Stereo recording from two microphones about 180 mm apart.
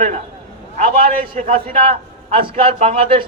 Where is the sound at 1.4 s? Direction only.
35° right (ahead or behind).